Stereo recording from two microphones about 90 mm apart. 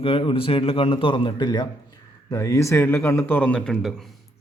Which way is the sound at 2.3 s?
35° left (ahead or behind).